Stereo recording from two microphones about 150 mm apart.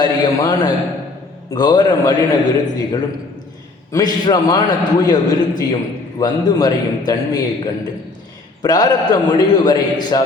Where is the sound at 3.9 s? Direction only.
25° left (ahead or behind).